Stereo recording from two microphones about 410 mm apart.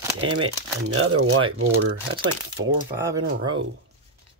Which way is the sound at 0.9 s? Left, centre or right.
Right.